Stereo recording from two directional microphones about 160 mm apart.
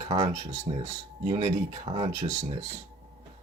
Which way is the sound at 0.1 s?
40° right (ahead or behind).